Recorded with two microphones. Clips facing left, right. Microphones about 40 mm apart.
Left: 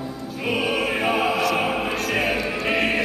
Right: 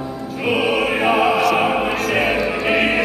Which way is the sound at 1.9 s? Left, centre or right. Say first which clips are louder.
Right 4 dB; centre.